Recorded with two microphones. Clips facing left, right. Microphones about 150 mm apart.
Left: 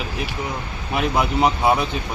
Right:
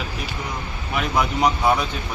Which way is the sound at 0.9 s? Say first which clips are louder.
Left 2 dB; 25° left (ahead or behind).